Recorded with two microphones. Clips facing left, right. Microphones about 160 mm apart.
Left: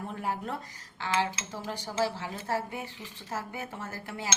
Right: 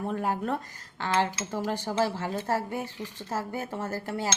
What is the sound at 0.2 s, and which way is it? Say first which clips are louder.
Speech: right 5 dB; 50° right (ahead or behind).